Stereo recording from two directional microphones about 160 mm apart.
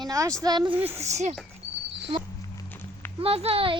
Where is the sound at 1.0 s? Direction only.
45° right (ahead or behind).